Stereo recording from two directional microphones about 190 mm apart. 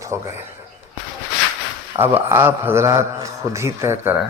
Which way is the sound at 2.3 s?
10° right (ahead or behind).